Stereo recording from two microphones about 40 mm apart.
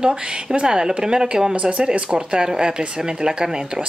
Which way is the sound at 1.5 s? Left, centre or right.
Right.